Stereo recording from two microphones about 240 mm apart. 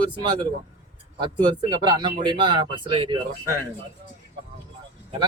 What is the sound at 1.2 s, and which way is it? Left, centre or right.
Speech, centre.